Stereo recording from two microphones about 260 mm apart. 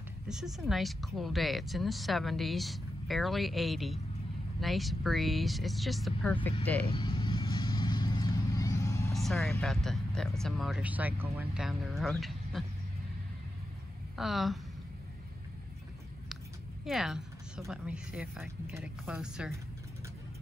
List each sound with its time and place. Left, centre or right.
0.3 s speech: centre
6.9 s vehicle: centre
9.1 s speech: centre
14.1 s speech: centre
16.8 s speech: centre